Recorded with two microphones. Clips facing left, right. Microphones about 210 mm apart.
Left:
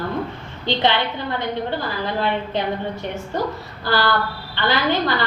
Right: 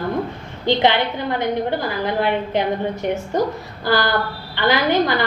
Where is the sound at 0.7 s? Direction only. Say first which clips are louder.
Right 3 dB; 15° right (ahead or behind).